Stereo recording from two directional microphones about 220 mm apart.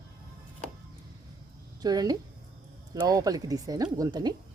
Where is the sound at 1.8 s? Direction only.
15° right (ahead or behind).